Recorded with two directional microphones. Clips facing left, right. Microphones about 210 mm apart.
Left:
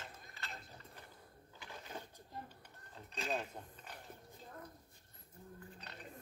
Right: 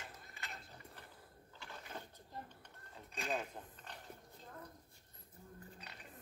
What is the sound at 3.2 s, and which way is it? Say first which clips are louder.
Mechanisms: left 1 dB; 10° right (ahead or behind).